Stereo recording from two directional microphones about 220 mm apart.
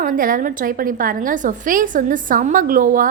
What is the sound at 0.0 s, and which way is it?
A woman's voice, 40° right (ahead or behind).